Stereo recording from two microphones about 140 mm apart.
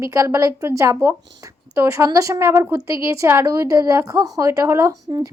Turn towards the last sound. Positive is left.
turn(degrees=-25)  # may be behind; listen again after turning